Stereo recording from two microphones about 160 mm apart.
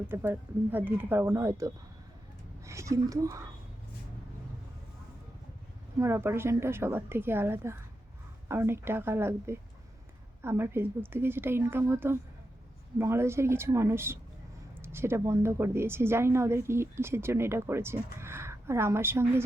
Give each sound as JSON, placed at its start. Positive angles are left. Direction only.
{"t": 0.1, "sound": "a woman's voice", "side_deg": -15}
{"t": 6.0, "sound": "a woman's voice", "side_deg": -15}